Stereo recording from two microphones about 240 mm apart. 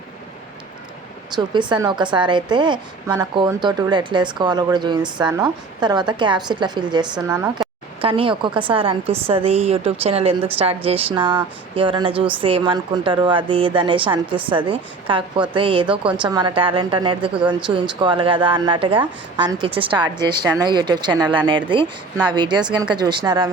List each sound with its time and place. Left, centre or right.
1.4 s a woman's voice: centre